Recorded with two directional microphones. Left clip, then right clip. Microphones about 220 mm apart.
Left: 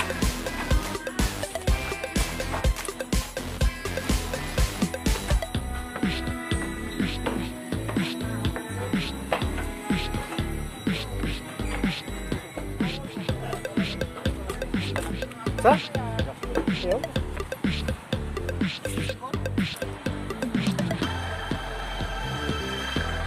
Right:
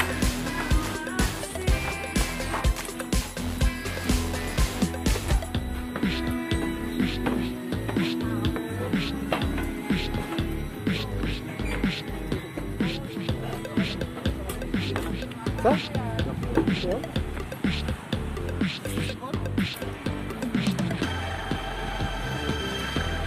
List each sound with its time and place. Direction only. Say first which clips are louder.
0.2 s music: right 1 dB; centre (ahead or behind)
11.8 s music: even; centre (ahead or behind)